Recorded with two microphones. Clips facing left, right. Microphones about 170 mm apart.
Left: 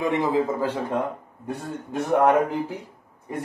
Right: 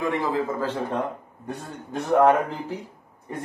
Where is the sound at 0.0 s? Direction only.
20° left (ahead or behind).